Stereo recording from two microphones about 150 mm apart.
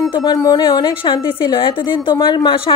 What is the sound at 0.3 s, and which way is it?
A woman's voice, 25° left (ahead or behind).